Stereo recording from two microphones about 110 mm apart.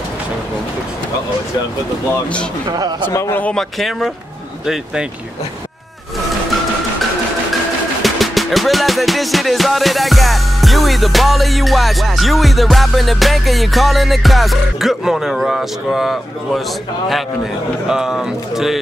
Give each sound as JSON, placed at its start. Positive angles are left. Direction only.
{"t": 2.7, "sound": "speech", "side_deg": -40}
{"t": 3.1, "sound": "a man's voice", "side_deg": 20}
{"t": 3.5, "sound": "music", "side_deg": 0}
{"t": 8.0, "sound": "music", "side_deg": 0}
{"t": 17.8, "sound": "music", "side_deg": -5}